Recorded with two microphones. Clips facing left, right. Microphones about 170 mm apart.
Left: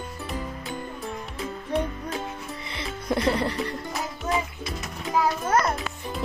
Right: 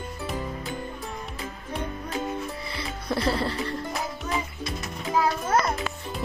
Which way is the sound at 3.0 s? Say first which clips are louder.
Left 2 dB; 20° left (ahead or behind).